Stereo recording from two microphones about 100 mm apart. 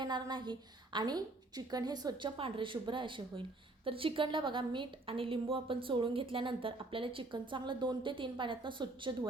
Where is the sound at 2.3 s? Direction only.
60° right (ahead or behind).